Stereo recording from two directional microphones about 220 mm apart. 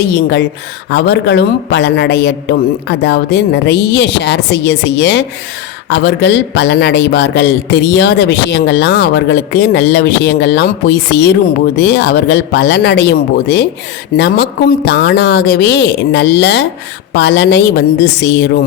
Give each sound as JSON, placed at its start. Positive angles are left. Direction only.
{"t": 0.0, "sound": "speech", "side_deg": 50}